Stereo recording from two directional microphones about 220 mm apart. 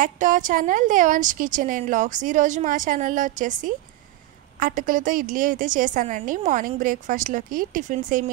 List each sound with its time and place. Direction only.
0.0 s a woman's voice: 35° right (ahead or behind)